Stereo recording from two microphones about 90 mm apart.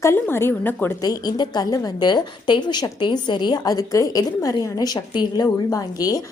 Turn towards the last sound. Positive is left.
turn(degrees=40)  # may be behind; listen again after turning